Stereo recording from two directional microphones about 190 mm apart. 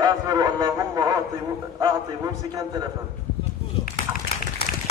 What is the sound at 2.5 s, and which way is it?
Speech, 20° right (ahead or behind).